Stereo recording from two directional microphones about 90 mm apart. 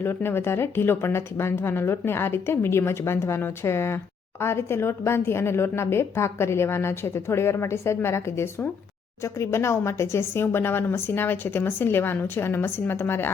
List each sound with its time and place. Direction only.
0.0 s a woman's voice: 25° left (ahead or behind)